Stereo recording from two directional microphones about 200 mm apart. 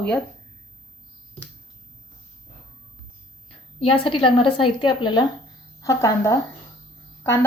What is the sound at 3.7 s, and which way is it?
A woman's voice, 25° left (ahead or behind).